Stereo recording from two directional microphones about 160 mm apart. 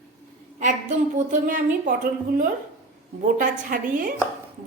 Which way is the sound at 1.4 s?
60° right (ahead or behind).